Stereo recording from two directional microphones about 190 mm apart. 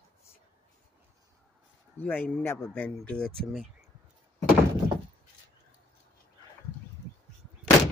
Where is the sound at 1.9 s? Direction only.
10° left (ahead or behind).